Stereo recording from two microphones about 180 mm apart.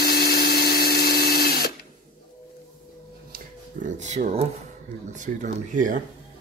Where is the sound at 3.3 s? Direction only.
45° right (ahead or behind).